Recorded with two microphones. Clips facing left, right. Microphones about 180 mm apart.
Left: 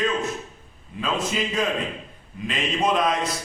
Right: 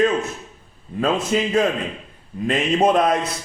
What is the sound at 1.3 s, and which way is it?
A man's voice, 45° right (ahead or behind).